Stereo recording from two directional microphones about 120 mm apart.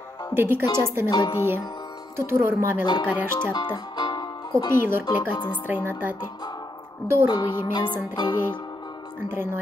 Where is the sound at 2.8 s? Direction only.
35° left (ahead or behind).